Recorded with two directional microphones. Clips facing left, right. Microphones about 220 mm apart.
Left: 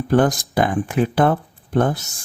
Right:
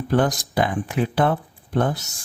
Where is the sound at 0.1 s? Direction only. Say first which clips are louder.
Left 4 dB; 50° left (ahead or behind).